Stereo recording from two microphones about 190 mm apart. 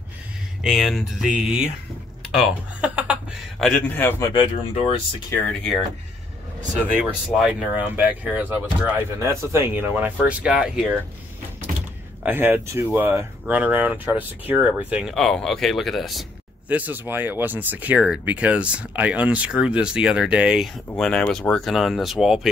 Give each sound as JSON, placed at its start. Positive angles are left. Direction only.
{"t": 0.7, "sound": "speech", "side_deg": 0}
{"t": 3.6, "sound": "a man's voice", "side_deg": 10}
{"t": 4.4, "sound": "speech", "side_deg": 30}
{"t": 5.4, "sound": "speech", "side_deg": 5}
{"t": 7.4, "sound": "speech", "side_deg": -5}
{"t": 12.2, "sound": "speech", "side_deg": -10}